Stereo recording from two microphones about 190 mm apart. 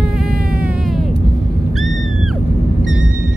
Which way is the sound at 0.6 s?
Centre (ahead or behind).